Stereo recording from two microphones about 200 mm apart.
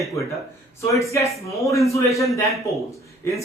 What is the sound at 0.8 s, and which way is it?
Speech, 15° left (ahead or behind).